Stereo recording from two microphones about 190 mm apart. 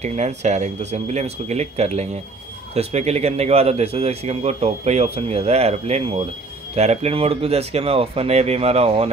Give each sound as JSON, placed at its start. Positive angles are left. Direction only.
{"t": 0.0, "sound": "a man's voice", "side_deg": -35}